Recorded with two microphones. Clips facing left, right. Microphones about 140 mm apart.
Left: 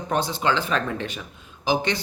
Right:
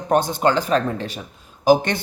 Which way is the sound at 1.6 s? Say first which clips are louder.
Right 7 dB; 50° right (ahead or behind).